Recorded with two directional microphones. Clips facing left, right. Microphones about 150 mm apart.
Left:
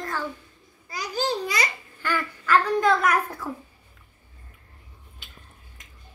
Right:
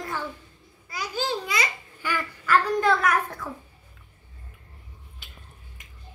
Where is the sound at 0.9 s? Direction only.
35° left (ahead or behind).